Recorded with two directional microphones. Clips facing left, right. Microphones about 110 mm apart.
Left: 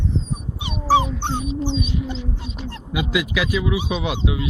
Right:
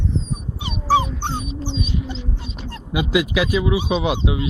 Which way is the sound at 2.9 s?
30° right (ahead or behind).